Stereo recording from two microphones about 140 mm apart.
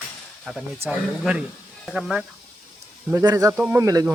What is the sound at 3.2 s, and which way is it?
Speech, 25° right (ahead or behind).